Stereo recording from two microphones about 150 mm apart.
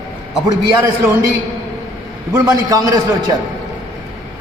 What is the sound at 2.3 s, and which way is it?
A man's voice, 25° right (ahead or behind).